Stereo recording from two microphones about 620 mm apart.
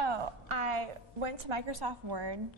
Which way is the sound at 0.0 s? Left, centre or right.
Right.